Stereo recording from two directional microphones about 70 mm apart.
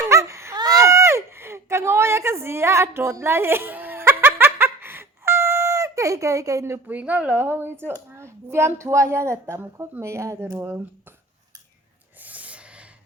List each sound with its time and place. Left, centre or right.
0.1 s baby cry: right
0.5 s a sound: right
6.8 s a woman's voice: right
12.2 s snort: right